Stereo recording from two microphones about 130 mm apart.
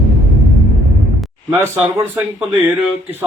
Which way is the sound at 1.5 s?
15° right (ahead or behind).